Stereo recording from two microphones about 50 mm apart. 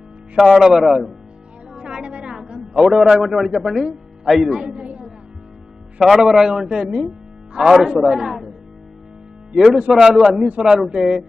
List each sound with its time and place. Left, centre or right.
0.4 s speech: centre
1.8 s music: centre
2.7 s a man's voice: centre
4.6 s a man's voice: centre
5.9 s a man's voice: centre
9.5 s a man's voice: centre
10.0 s a man's voice: centre